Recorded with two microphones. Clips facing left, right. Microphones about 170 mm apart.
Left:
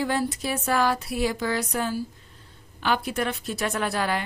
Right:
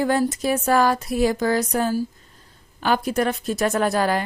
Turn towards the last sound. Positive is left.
turn(degrees=-40)  # may be behind; listen again after turning